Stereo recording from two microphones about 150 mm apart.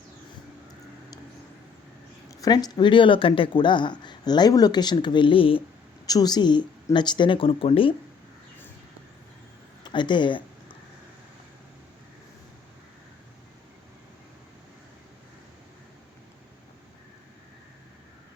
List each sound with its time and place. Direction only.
2.4 s speech: 25° left (ahead or behind)
6.1 s speech: 25° left (ahead or behind)
9.8 s a sound: 30° left (ahead or behind)